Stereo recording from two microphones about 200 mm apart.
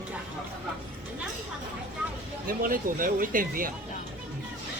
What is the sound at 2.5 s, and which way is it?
Speech, 45° right (ahead or behind).